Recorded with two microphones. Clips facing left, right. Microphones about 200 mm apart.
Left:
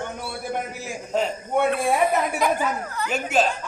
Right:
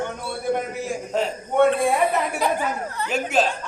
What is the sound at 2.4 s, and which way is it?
Speech, 30° right (ahead or behind).